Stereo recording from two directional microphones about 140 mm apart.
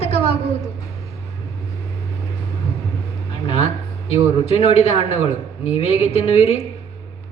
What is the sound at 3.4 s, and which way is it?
Speech, 45° left (ahead or behind).